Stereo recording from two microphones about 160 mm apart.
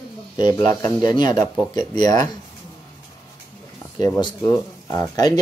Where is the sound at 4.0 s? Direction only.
20° left (ahead or behind).